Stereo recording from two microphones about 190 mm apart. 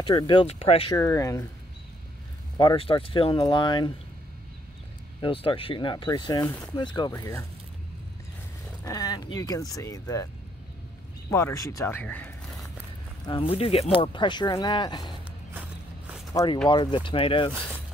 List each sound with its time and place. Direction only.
0.0 s speech: 25° left (ahead or behind)
0.9 s speech: 15° left (ahead or behind)
2.5 s speech: 25° left (ahead or behind)
5.2 s speech: 25° left (ahead or behind)
8.8 s speech: 20° left (ahead or behind)
11.2 s speech: 15° left (ahead or behind)
13.3 s speech: 30° left (ahead or behind)
16.6 s speech: 25° left (ahead or behind)